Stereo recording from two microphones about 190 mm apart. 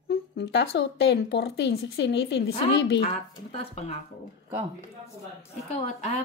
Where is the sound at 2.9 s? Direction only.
35° left (ahead or behind).